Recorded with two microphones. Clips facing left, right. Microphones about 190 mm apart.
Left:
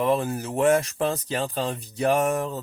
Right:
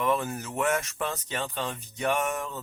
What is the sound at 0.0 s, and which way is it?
Speech, 30° left (ahead or behind).